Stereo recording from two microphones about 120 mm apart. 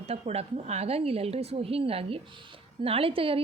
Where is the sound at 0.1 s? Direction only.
60° right (ahead or behind).